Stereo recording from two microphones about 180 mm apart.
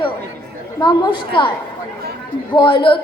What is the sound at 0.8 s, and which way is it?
Speech, 25° left (ahead or behind).